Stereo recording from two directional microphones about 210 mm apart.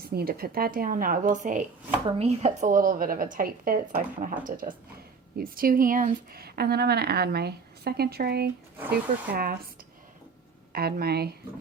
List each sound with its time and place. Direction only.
0.0 s a woman's voice: 45° right (ahead or behind)
10.7 s speech: 45° right (ahead or behind)